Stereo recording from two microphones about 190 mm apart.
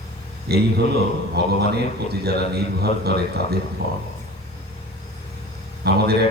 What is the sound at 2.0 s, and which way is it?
A man's voice, 60° right (ahead or behind).